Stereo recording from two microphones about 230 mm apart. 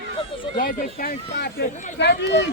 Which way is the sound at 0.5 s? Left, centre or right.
Left.